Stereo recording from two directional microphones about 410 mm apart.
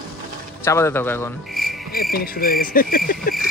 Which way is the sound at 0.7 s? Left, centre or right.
Centre.